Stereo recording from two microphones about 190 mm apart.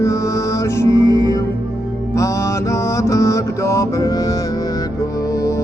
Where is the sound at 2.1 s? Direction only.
15° left (ahead or behind).